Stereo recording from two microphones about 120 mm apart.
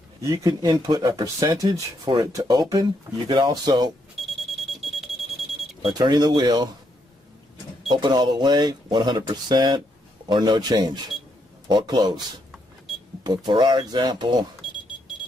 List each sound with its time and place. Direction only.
0.2 s speech: 25° right (ahead or behind)
2.7 s speech: 40° right (ahead or behind)
4.2 s alarm clock: centre (ahead or behind)
4.6 s alarm: centre (ahead or behind)
5.8 s speech: 40° right (ahead or behind)
7.9 s speech: 40° right (ahead or behind)
13.2 s speech: 40° right (ahead or behind)